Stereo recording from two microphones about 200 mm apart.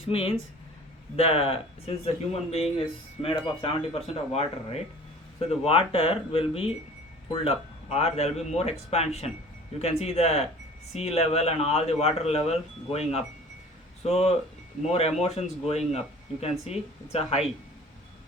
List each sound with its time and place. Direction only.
0.0 s speech: 30° left (ahead or behind)